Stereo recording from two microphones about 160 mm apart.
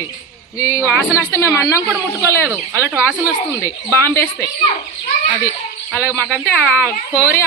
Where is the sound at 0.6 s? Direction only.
20° left (ahead or behind).